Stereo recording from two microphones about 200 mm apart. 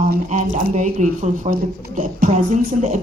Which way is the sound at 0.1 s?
40° right (ahead or behind).